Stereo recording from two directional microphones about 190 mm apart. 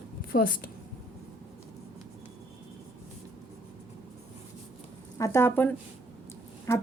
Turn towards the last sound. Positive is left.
turn(degrees=15)  # may be behind; listen again after turning